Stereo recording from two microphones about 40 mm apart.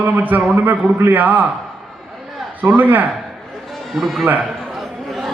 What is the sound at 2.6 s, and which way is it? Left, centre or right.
Speech, right.